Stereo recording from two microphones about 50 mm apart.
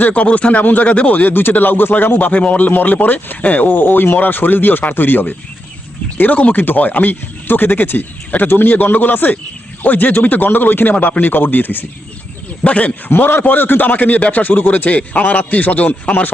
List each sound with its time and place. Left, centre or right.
0.0 s a man's voice: left
12.6 s a man's voice: left
13.1 s a man's voice: left